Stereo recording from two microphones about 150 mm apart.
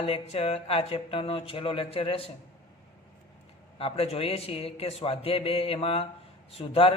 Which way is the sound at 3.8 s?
40° left (ahead or behind).